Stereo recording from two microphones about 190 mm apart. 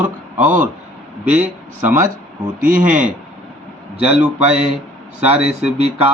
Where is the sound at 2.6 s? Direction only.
45° right (ahead or behind).